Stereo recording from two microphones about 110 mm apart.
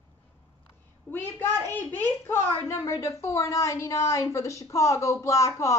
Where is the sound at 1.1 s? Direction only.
20° left (ahead or behind).